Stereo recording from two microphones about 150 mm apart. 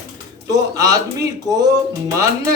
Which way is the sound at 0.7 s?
20° right (ahead or behind).